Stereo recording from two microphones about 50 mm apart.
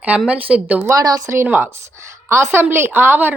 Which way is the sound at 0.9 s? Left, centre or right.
Right.